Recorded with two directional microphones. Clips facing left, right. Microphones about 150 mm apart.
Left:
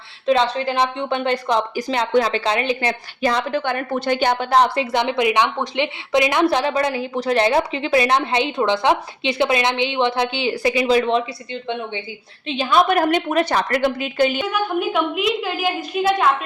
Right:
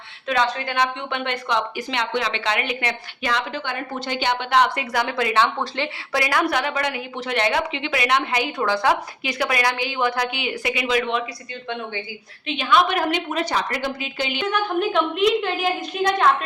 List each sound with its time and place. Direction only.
0.3 s speech: 30° left (ahead or behind)
12.5 s a woman's voice: 35° left (ahead or behind)
14.4 s a woman's voice: 5° left (ahead or behind)